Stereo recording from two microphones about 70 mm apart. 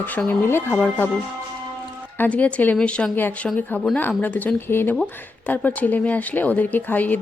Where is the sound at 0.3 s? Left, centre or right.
Left.